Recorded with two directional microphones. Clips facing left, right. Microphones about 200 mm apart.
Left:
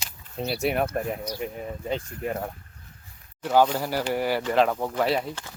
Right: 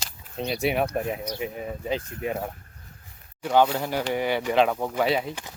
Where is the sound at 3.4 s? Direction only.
5° left (ahead or behind).